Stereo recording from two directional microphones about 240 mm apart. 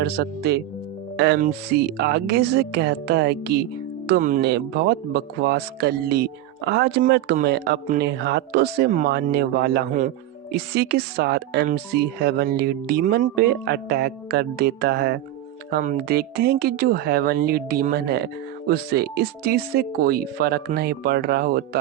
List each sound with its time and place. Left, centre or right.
0.0 s speech: right